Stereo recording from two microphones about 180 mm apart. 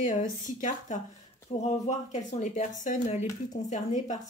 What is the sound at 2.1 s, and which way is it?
Speech, 45° left (ahead or behind).